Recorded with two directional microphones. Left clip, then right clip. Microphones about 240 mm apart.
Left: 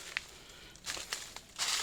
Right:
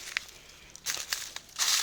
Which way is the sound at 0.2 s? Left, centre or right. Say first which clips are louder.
Right 5 dB; right.